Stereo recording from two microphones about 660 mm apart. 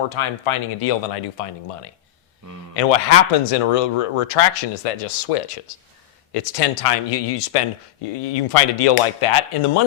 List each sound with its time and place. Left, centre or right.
0.1 s speech: left